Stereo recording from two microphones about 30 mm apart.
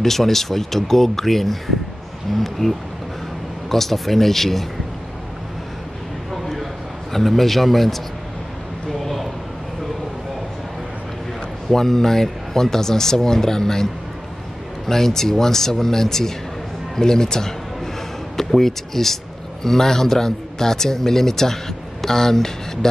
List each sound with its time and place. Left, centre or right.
0.0 s speech: centre
6.4 s a sound: centre
11.7 s speech: centre
14.9 s speech: centre
18.5 s speech: centre